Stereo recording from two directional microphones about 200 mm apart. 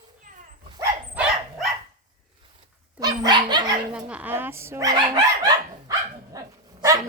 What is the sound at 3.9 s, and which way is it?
Speech, 5° right (ahead or behind).